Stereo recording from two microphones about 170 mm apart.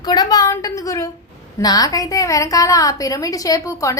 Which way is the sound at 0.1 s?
20° left (ahead or behind).